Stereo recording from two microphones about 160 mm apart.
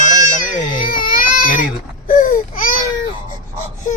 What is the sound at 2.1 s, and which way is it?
Wail, 60° left (ahead or behind).